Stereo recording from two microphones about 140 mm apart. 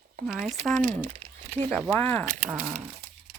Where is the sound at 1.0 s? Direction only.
50° right (ahead or behind).